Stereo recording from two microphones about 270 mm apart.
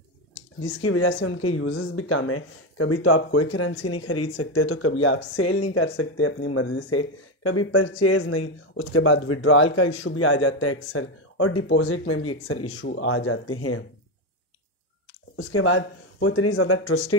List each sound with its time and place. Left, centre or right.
0.7 s speech: left
15.3 s speech: left